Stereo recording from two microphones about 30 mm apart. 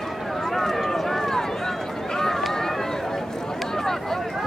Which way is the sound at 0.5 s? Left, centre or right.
Centre.